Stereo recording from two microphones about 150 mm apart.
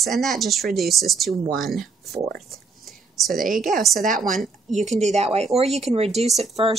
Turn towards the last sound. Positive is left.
turn(degrees=-45)  # may be behind; listen again after turning